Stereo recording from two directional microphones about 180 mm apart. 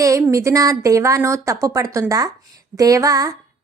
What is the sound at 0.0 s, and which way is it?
A woman's voice, 15° right (ahead or behind).